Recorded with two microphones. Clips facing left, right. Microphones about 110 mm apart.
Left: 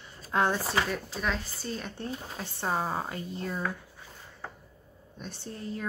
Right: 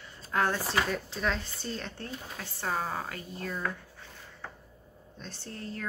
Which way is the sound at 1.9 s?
20° left (ahead or behind).